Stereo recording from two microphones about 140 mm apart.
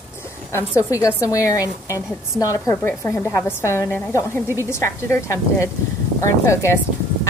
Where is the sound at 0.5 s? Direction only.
20° left (ahead or behind).